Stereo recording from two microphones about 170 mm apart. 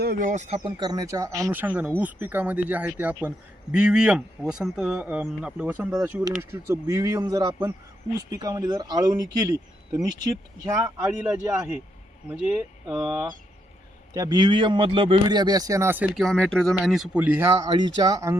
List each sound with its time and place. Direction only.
0.0 s speech: 55° right (ahead or behind); by 0.7 s 40° right (ahead or behind)
0.8 s speech: 25° right (ahead or behind); by 13.2 s 5° right (ahead or behind)
14.1 s speech: 20° right (ahead or behind)
16.1 s speech: 5° left (ahead or behind); by 18.3 s 20° right (ahead or behind)